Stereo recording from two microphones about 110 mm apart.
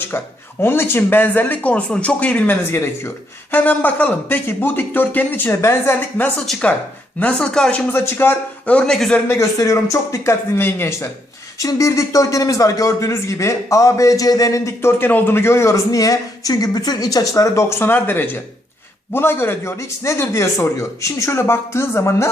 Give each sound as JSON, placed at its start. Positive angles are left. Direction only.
{"t": 0.6, "sound": "speech", "side_deg": 20}
{"t": 6.4, "sound": "speech", "side_deg": 5}
{"t": 9.2, "sound": "a man's voice", "side_deg": 25}